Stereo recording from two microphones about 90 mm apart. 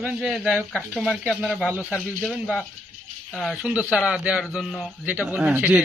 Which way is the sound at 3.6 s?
15° right (ahead or behind).